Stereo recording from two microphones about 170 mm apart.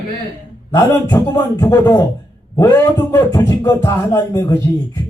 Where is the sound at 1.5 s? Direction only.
15° left (ahead or behind).